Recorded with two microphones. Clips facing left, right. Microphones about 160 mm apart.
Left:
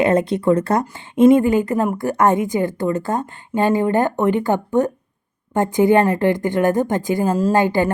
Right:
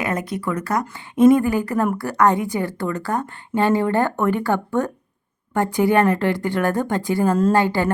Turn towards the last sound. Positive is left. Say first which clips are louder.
# left 1 dB
turn(degrees=20)  # may be behind; listen again after turning